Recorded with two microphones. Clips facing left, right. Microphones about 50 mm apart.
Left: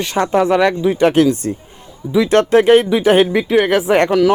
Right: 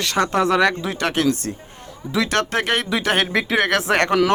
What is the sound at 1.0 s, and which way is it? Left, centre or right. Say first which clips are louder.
Speech: left 7 dB; left.